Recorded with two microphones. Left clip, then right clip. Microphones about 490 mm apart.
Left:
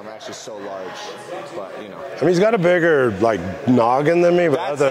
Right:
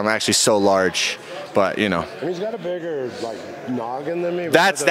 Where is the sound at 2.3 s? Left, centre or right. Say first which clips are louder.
Left 15 dB; left.